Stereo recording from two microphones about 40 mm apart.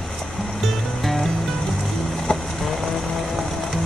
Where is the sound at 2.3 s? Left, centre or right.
Centre.